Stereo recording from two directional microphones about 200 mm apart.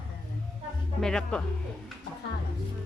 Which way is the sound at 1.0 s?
5° left (ahead or behind).